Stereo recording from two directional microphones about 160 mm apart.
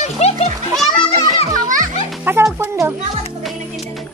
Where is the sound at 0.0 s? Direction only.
45° left (ahead or behind).